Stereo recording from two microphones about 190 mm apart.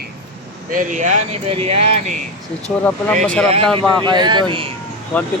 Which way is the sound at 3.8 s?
25° right (ahead or behind).